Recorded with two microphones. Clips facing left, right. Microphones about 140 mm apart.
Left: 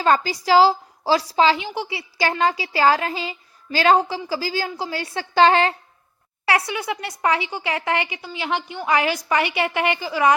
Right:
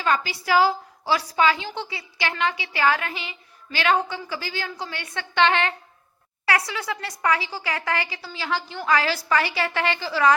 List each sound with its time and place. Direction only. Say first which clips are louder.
0.0 s a woman's voice: left 5 dB; 40° left (ahead or behind)
1.5 s a woman's voice: left 4 dB; 20° left (ahead or behind)
2.4 s a woman's voice: left 4 dB; 35° left (ahead or behind)
6.7 s a woman's voice: left 3 dB; 20° left (ahead or behind)